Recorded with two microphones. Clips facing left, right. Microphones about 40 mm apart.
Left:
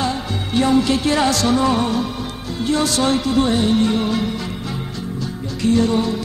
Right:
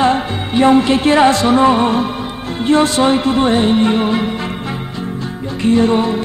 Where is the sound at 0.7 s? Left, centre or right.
Right.